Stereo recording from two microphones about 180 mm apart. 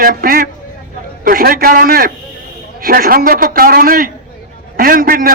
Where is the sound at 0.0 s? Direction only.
50° right (ahead or behind).